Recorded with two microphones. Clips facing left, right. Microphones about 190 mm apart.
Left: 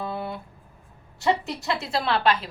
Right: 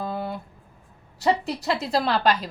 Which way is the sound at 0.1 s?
40° right (ahead or behind).